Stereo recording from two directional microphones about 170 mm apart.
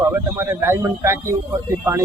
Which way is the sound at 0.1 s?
15° right (ahead or behind).